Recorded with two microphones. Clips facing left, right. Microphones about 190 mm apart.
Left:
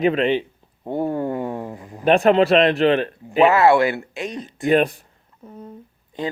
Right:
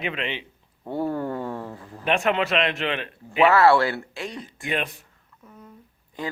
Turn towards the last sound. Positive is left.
turn(degrees=20)  # may be behind; listen again after turning